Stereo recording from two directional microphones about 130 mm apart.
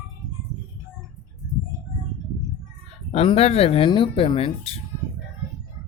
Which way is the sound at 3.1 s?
50° left (ahead or behind).